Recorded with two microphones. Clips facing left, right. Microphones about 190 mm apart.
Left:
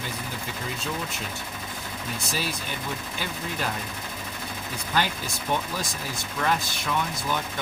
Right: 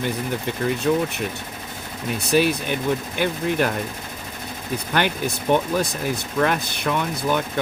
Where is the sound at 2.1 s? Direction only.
65° right (ahead or behind).